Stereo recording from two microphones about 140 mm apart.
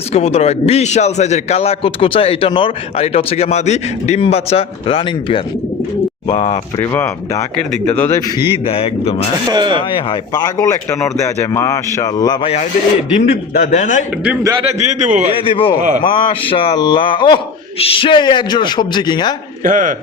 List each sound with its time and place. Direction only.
0.1 s a man's voice: 50° left (ahead or behind)
6.7 s speech: 15° left (ahead or behind)
8.6 s a man's voice: 45° left (ahead or behind)
9.5 s speech: 30° right (ahead or behind)
9.9 s speech: 30° left (ahead or behind)
13.1 s a man's voice: 60° left (ahead or behind)
14.6 s a man's voice: 50° right (ahead or behind)
15.3 s a man's voice: 40° left (ahead or behind)
19.6 s speech: 70° right (ahead or behind)